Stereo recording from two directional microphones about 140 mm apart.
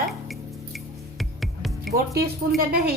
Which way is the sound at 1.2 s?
Centre (ahead or behind).